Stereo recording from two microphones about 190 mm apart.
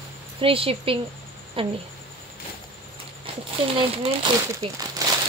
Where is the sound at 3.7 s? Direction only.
30° right (ahead or behind).